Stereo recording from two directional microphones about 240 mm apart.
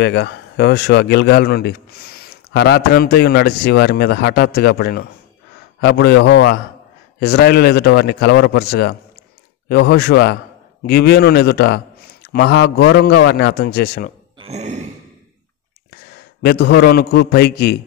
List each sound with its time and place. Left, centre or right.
0.0 s a man's voice: left
14.4 s a sound: right
16.4 s a man's voice: left